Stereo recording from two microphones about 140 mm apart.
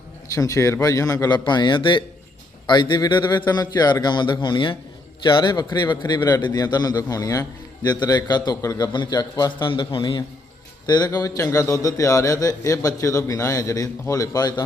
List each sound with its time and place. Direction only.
0.3 s a man's voice: 25° left (ahead or behind)